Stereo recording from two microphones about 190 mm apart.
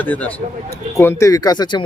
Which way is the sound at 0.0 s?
10° left (ahead or behind).